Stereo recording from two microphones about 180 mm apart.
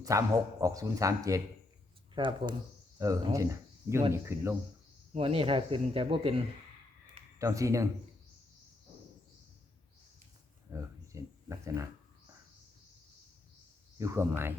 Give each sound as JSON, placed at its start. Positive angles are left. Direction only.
{"t": 0.0, "sound": "speech", "side_deg": -20}
{"t": 5.1, "sound": "speech", "side_deg": -30}
{"t": 7.3, "sound": "speech", "side_deg": -15}
{"t": 10.7, "sound": "a sound", "side_deg": -15}
{"t": 14.0, "sound": "speech", "side_deg": -15}